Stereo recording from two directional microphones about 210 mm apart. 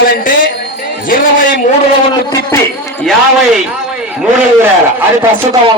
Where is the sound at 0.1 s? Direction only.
40° left (ahead or behind).